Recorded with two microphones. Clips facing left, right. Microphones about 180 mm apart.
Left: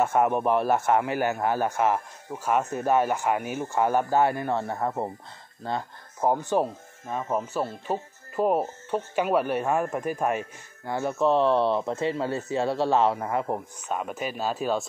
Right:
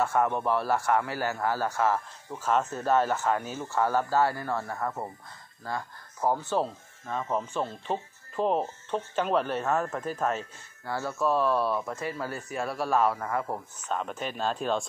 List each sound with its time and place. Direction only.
0.0 s a man's voice: 20° left (ahead or behind)
13.7 s speech: 10° left (ahead or behind)